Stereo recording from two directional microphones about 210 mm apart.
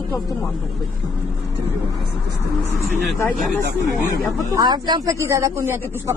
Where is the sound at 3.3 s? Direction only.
Centre (ahead or behind).